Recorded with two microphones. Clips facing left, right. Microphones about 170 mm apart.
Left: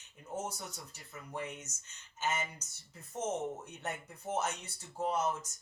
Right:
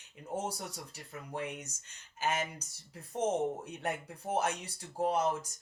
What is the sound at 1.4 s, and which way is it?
Speech, 10° right (ahead or behind).